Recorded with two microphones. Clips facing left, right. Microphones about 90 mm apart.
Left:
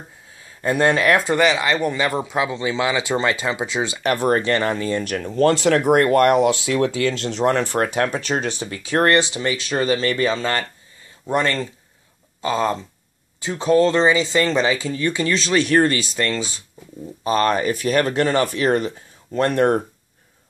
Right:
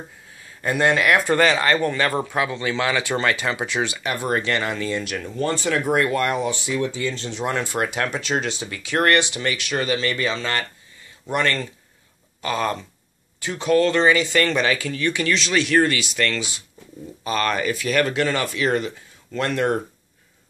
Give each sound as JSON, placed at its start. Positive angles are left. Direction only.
{"t": 0.6, "sound": "speech", "side_deg": 30}
{"t": 1.3, "sound": "speech", "side_deg": 15}
{"t": 4.0, "sound": "speech", "side_deg": 50}
{"t": 4.4, "sound": "speech", "side_deg": 35}
{"t": 5.4, "sound": "speech", "side_deg": 80}
{"t": 5.8, "sound": "speech", "side_deg": 50}
{"t": 7.4, "sound": "speech", "side_deg": 45}